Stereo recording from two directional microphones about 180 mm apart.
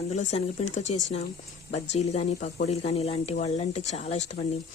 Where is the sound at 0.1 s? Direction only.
40° left (ahead or behind).